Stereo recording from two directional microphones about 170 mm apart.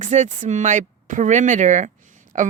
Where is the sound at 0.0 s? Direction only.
45° right (ahead or behind).